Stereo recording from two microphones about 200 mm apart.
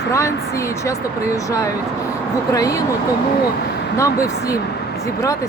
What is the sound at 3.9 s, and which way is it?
Speech, 15° left (ahead or behind).